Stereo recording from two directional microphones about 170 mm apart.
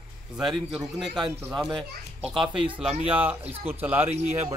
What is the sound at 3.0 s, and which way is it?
Speech, 10° right (ahead or behind).